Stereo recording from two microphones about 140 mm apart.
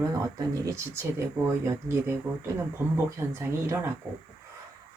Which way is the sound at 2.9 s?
15° right (ahead or behind).